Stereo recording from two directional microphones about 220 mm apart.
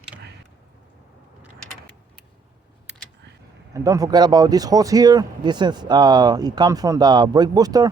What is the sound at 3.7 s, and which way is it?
Speech, 15° right (ahead or behind).